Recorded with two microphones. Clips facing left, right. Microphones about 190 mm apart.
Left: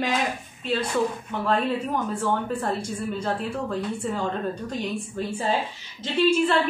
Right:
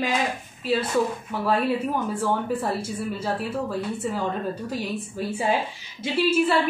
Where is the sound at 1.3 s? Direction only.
10° right (ahead or behind).